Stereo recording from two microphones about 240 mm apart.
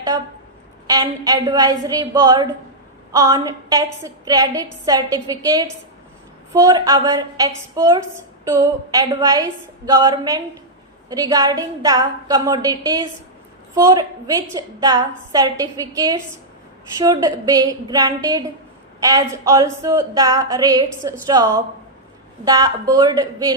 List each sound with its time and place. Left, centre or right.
0.9 s a woman's voice: centre